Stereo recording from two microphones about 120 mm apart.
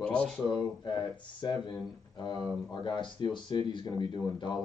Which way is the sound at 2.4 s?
Centre (ahead or behind).